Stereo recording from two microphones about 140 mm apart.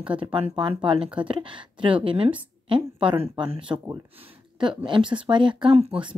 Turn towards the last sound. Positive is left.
turn(degrees=-40)  # may be behind; listen again after turning